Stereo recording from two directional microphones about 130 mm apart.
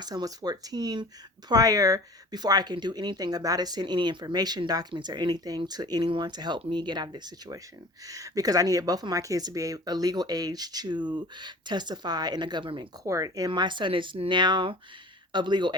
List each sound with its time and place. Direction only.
0.0 s speech: 30° right (ahead or behind)
13.1 s speech: 25° right (ahead or behind)
13.5 s speech: 35° right (ahead or behind)